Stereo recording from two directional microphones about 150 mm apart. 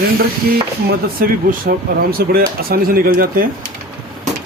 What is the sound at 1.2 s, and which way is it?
Speech, 80° right.